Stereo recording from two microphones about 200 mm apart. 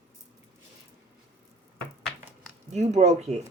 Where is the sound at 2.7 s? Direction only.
35° right (ahead or behind).